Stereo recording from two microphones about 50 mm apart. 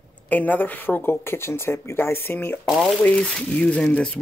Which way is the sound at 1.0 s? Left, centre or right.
Left.